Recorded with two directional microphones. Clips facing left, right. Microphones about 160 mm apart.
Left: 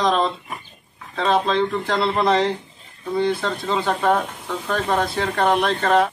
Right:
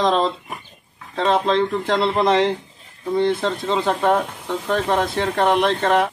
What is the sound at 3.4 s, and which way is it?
Speech, 25° right (ahead or behind).